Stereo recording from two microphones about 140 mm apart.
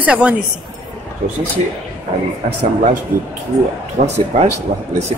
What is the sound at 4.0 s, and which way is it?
Speech, 65° right (ahead or behind).